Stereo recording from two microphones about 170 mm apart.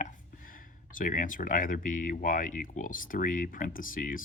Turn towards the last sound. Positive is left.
turn(degrees=55)  # may be behind; listen again after turning